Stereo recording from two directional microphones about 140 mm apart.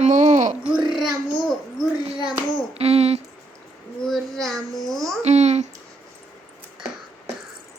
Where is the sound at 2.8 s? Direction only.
50° right (ahead or behind).